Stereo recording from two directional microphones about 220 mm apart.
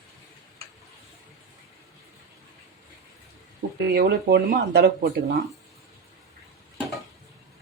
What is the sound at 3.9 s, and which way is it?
Speech, 50° right (ahead or behind).